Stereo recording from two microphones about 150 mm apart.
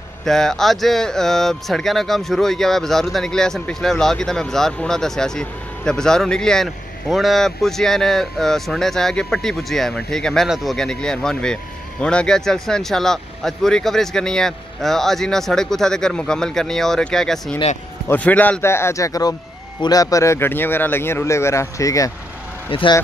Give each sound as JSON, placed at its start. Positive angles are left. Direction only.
{"t": 0.2, "sound": "speech", "side_deg": 5}
{"t": 22.7, "sound": "speech", "side_deg": 35}